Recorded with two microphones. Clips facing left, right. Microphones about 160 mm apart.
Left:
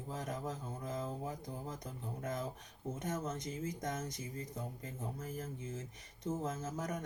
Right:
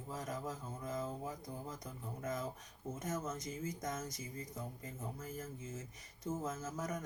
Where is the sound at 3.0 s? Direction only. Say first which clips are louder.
Left 1 dB; 30° left (ahead or behind).